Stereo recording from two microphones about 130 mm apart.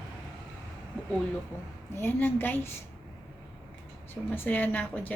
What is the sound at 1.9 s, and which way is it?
Speech, 15° left (ahead or behind).